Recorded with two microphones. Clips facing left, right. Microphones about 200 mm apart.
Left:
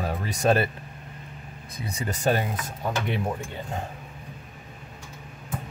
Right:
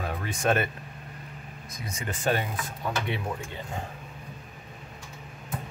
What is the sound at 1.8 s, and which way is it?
Speech, 35° left (ahead or behind).